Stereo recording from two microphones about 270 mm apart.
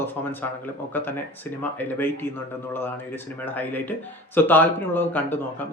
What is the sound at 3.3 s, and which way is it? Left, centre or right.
Speech, centre.